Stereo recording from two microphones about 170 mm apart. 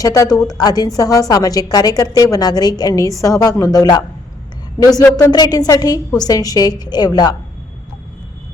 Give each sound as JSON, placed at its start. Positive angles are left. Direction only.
{"t": 0.0, "sound": "a woman's voice", "side_deg": 20}
{"t": 5.1, "sound": "a woman's voice", "side_deg": 25}